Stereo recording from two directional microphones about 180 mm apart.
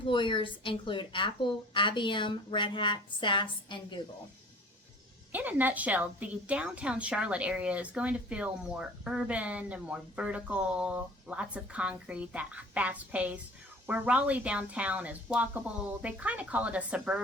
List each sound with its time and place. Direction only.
0.0 s a woman's voice: 25° left (ahead or behind)
5.3 s a woman's voice: 10° right (ahead or behind)